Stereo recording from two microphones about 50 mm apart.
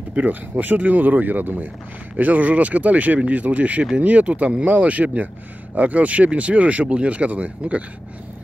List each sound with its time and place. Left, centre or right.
0.1 s speech: right